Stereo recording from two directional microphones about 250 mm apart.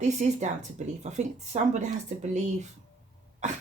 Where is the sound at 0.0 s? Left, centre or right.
Right.